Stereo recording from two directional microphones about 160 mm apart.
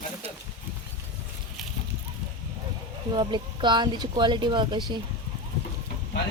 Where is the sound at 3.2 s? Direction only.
30° right (ahead or behind).